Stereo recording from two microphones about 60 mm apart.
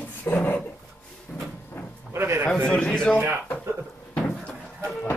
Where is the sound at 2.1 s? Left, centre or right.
Right.